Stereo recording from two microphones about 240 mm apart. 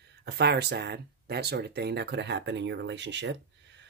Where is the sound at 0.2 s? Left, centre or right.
Right.